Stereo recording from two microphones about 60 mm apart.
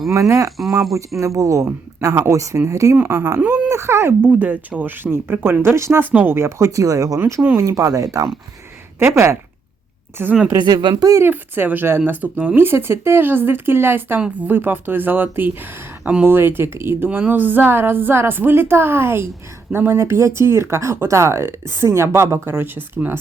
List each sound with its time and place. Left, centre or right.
0.1 s speech: right
3.5 s speech: right
4.3 s speech: right
6.1 s speech: right
6.3 s speech: right
7.5 s speech: right
9.0 s speech: right
10.2 s speech: right
10.7 s speech: right
11.2 s speech: right
17.1 s speech: right